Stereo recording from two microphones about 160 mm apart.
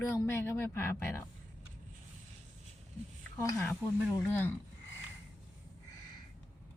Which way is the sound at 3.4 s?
15° left (ahead or behind).